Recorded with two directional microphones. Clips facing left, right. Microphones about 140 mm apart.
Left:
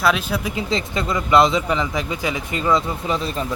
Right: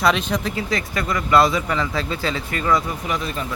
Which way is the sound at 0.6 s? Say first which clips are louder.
Left 1 dB; 25° left (ahead or behind).